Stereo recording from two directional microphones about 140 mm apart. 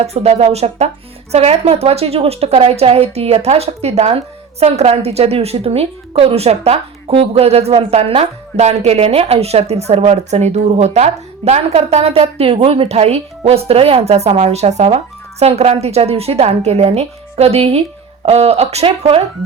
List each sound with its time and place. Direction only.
0.0 s a woman's voice: 50° right (ahead or behind)